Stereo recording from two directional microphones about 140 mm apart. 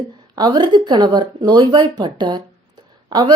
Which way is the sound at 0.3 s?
30° right (ahead or behind).